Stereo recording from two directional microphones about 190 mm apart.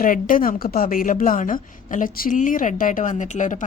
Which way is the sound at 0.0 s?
45° left (ahead or behind).